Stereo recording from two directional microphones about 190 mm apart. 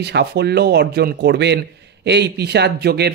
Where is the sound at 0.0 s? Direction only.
60° right (ahead or behind).